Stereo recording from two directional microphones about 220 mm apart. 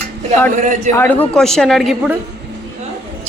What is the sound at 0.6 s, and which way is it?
Speech, 35° right (ahead or behind).